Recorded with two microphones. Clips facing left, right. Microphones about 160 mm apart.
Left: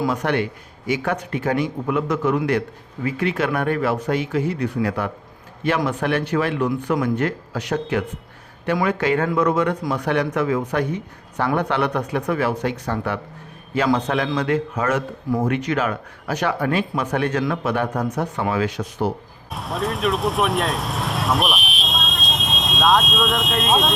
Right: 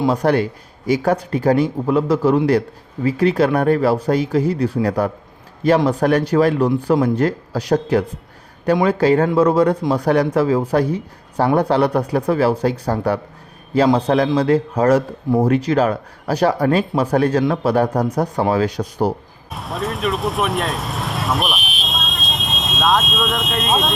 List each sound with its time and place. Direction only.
0.0 s a man's voice: 35° right (ahead or behind)
19.5 s speech: centre (ahead or behind)